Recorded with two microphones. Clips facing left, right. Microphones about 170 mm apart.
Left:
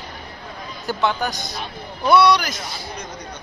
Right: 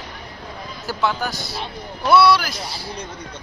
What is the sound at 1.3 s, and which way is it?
Speech, 20° left (ahead or behind).